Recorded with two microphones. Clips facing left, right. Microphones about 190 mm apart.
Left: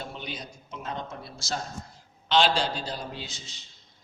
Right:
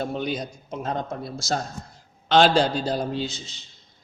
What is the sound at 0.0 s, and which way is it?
A man's voice, 45° right (ahead or behind).